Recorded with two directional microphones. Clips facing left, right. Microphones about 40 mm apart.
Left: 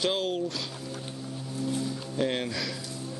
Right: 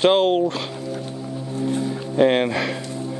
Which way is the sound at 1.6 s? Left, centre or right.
Right.